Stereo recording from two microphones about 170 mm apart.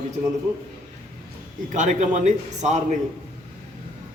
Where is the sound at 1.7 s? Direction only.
45° right (ahead or behind).